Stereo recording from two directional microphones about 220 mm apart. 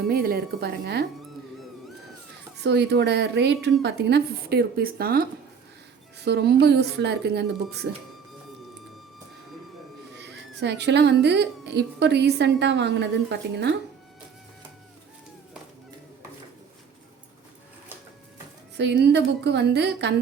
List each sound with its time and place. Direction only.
0.1 s a woman's voice: 45° right (ahead or behind)
2.6 s a woman's voice: 50° right (ahead or behind)
10.2 s a woman's voice: 50° right (ahead or behind)
18.8 s a woman's voice: 50° right (ahead or behind)